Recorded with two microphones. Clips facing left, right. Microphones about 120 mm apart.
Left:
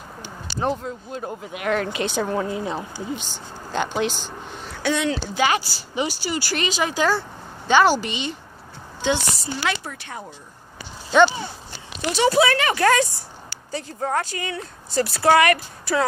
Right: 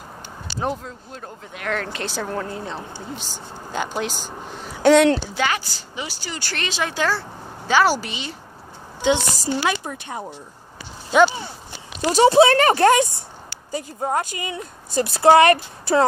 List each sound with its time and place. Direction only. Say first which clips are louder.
0.6 s a woman's voice: left 2 dB; centre (ahead or behind)
3.2 s speech: right 1 dB; 40° right (ahead or behind)
3.7 s a woman's voice: left 2 dB; 5° right (ahead or behind)
4.8 s speech: right 9 dB; 65° right (ahead or behind)
5.4 s a woman's voice: left 2 dB; 10° left (ahead or behind); by 8.4 s 5° right (ahead or behind)
9.6 s speech: right 1 dB; 20° right (ahead or behind)
11.1 s speech: even; 10° right (ahead or behind)
12.0 s speech: right 5 dB; 40° right (ahead or behind)
12.9 s a woman's voice: right 2 dB; 20° right (ahead or behind)